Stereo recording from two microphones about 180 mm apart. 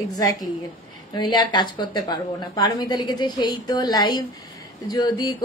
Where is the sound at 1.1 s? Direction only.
25° left (ahead or behind).